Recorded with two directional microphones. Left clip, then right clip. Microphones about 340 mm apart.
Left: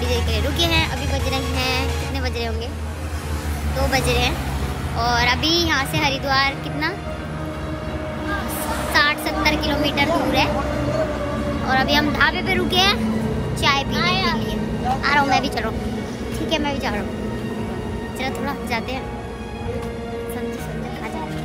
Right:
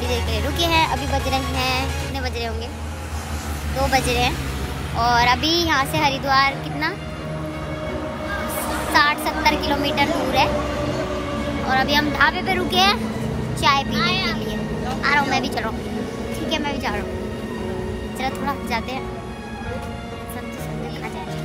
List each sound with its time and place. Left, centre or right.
0.1 s music: centre
3.7 s speech: centre
8.9 s speech: centre
11.6 s speech: centre
13.9 s a child's voice: left
15.0 s a woman's voice: centre
18.2 s speech: centre